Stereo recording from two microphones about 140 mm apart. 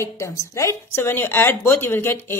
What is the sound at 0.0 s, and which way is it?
A woman's voice, 20° left (ahead or behind).